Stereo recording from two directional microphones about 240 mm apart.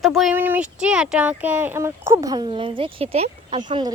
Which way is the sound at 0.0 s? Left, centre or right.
Centre.